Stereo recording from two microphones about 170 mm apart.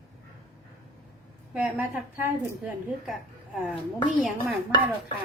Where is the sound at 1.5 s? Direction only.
10° right (ahead or behind).